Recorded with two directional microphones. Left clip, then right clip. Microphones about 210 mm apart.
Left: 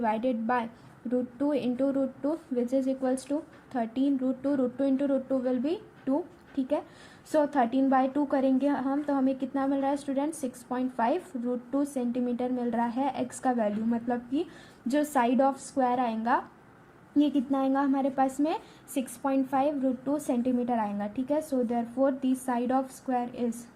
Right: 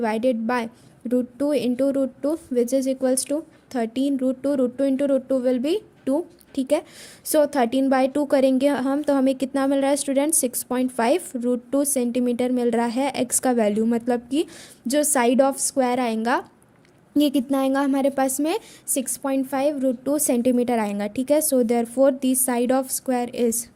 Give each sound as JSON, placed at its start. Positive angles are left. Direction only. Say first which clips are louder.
{"t": 0.0, "sound": "a woman's voice", "louder": "right 6 dB", "side_deg": -55}